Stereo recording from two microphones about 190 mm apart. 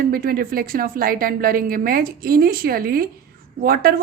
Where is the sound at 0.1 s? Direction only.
50° right (ahead or behind).